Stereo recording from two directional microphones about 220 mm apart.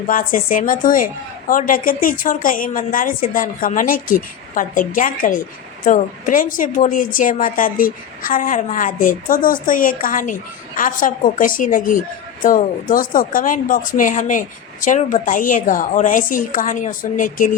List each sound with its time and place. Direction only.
0.1 s a woman's voice: 40° left (ahead or behind)